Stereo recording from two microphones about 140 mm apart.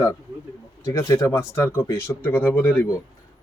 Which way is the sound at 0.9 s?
20° left (ahead or behind).